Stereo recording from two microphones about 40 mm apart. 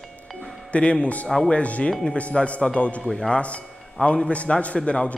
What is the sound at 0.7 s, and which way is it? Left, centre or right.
A man's voice, left.